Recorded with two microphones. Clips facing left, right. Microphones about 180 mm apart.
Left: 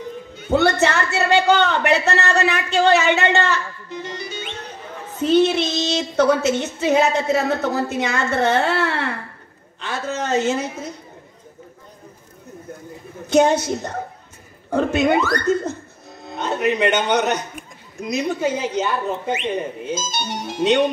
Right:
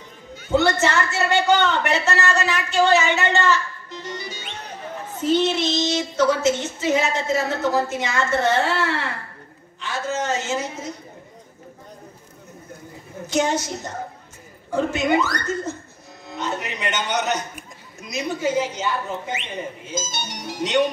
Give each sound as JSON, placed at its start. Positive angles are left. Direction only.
{"t": 0.5, "sound": "a woman's voice", "side_deg": 60}
{"t": 5.2, "sound": "speech", "side_deg": 60}
{"t": 9.8, "sound": "a sound", "side_deg": 60}
{"t": 13.3, "sound": "speech", "side_deg": 60}
{"t": 14.7, "sound": "a man's voice", "side_deg": 60}